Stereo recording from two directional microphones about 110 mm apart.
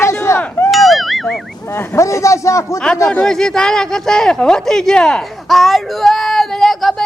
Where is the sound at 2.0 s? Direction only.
25° left (ahead or behind).